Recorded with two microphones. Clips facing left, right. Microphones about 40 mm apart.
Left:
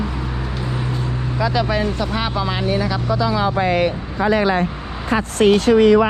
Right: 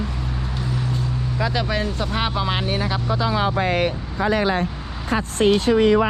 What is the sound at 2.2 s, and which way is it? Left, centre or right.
Speech, right.